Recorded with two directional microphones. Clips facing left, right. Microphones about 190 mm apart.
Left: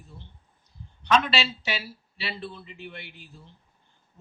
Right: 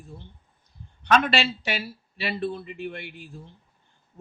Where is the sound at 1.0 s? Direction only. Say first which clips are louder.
Right 2 dB; 50° right (ahead or behind).